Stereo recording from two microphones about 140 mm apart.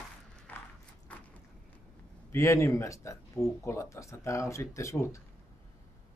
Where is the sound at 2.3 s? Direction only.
20° left (ahead or behind).